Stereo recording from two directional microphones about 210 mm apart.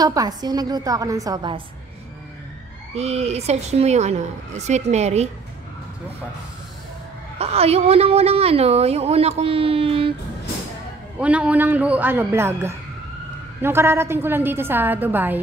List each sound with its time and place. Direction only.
0.0 s a woman's voice: 20° right (ahead or behind)
2.9 s speech: 30° right (ahead or behind)
7.3 s a woman's voice: 30° right (ahead or behind)
11.1 s a woman's voice: 5° right (ahead or behind)